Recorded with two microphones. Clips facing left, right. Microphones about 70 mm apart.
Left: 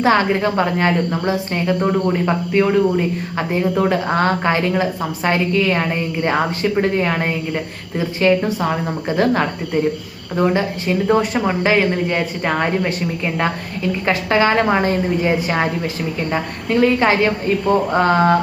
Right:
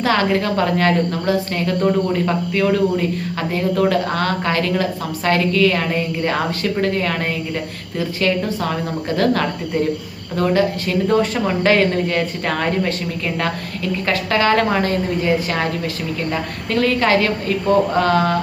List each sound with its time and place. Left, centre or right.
0.0 s speech: left